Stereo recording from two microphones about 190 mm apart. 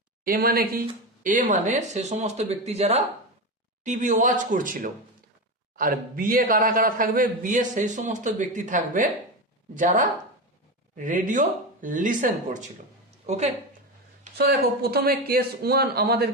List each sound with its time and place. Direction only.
0.3 s a man's voice: 50° right (ahead or behind); by 13.5 s 35° right (ahead or behind)
14.3 s speech: 55° right (ahead or behind)